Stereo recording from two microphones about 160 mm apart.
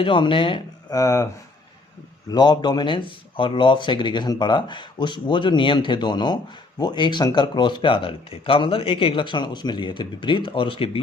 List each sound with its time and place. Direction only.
0.0 s speech: 30° left (ahead or behind)
2.3 s speech: 25° left (ahead or behind)